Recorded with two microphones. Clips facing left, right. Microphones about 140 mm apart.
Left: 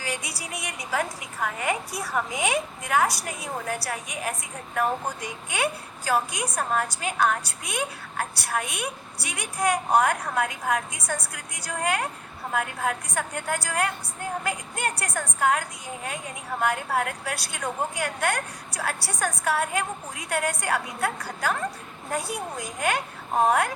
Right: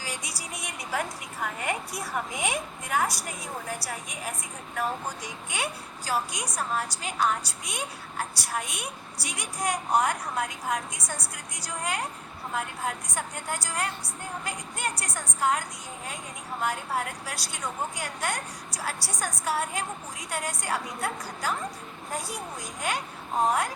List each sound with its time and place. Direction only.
0.0 s a sound: 60° left (ahead or behind)
2.1 s a woman's voice: 90° left; by 4.4 s 70° left (ahead or behind)
4.8 s a woman's voice: 55° left (ahead or behind)